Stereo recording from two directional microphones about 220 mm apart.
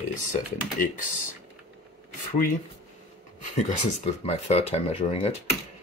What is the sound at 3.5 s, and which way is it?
Speech, 30° left (ahead or behind).